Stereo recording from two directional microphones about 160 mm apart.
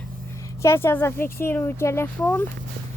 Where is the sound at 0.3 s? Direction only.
20° left (ahead or behind).